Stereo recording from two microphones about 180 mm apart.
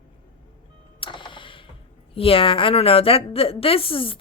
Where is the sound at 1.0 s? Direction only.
25° left (ahead or behind).